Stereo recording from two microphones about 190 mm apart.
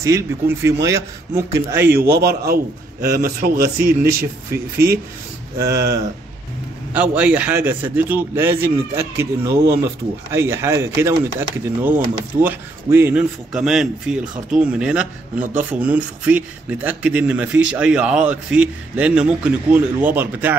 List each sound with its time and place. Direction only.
0.0 s a man's voice: 15° right (ahead or behind)
2.1 s a man's voice: 55° right (ahead or behind)
5.6 s a man's voice: 15° right (ahead or behind)